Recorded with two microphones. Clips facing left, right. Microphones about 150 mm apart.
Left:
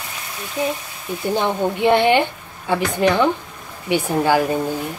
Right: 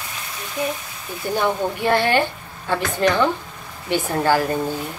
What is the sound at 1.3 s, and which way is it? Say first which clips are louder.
A woman's voice: even; 20° left (ahead or behind).